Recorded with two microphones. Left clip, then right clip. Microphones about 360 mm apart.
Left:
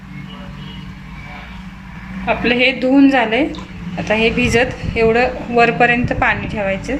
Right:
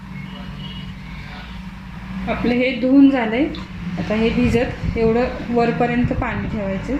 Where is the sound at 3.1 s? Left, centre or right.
Left.